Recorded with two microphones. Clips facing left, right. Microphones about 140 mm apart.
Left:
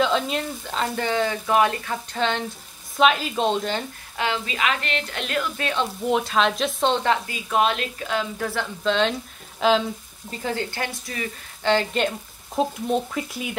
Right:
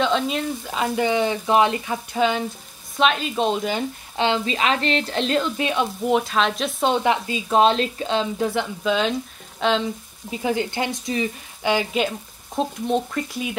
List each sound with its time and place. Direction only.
0.0 s speech: centre (ahead or behind)
4.2 s speech: 30° right (ahead or behind)
6.0 s speech: centre (ahead or behind); by 8.6 s 20° right (ahead or behind)
8.8 s speech: 5° right (ahead or behind)
10.3 s speech: 15° right (ahead or behind); by 13.6 s centre (ahead or behind)